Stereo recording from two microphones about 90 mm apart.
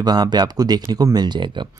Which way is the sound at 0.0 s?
50° right (ahead or behind).